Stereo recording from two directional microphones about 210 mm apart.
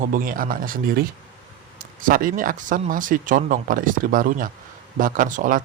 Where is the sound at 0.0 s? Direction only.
40° right (ahead or behind).